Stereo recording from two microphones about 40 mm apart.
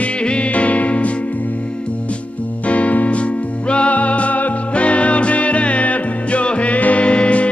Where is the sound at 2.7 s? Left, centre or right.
Left.